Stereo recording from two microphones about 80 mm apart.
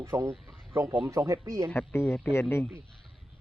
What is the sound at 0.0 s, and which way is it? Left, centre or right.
Speech, right.